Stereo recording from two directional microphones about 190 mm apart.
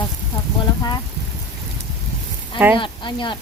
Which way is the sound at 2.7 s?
25° left (ahead or behind).